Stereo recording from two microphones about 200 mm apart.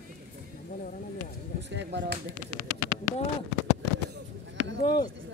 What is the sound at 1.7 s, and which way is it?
Speech, 60° right (ahead or behind).